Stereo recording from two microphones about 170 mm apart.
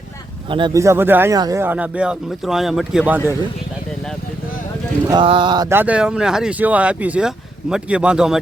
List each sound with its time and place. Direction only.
0.5 s mantra: 30° right (ahead or behind)
0.8 s speech: 15° right (ahead or behind)
5.1 s mantra: 30° right (ahead or behind)
5.7 s speech: 10° right (ahead or behind)